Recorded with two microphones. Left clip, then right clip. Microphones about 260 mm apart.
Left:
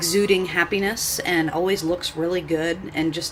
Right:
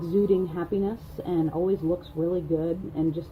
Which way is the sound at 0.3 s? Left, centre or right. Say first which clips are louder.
Left 6 dB; centre.